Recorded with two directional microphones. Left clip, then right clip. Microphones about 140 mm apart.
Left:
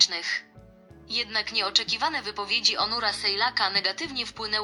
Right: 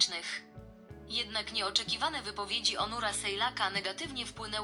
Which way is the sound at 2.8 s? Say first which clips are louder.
Left 7 dB; 55° left (ahead or behind).